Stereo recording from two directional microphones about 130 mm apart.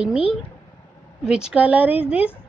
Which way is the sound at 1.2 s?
5° right (ahead or behind).